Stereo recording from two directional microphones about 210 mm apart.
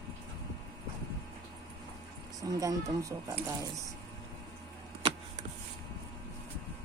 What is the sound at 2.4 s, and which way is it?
Speech, 15° right (ahead or behind).